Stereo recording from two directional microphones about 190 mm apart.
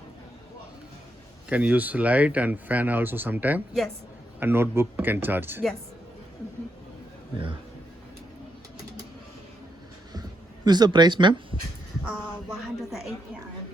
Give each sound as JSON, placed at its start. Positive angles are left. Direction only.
{"t": 1.5, "sound": "speech", "side_deg": -5}
{"t": 10.1, "sound": "a sound", "side_deg": -20}
{"t": 12.0, "sound": "speech", "side_deg": 0}